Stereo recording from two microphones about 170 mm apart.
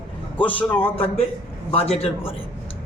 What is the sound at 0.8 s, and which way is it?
A man's voice, 35° left (ahead or behind).